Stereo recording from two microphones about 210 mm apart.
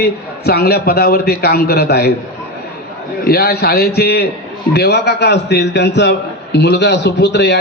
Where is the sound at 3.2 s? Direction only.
50° left (ahead or behind).